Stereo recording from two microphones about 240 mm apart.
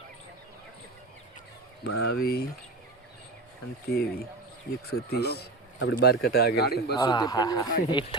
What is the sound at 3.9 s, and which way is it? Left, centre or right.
Speech, left.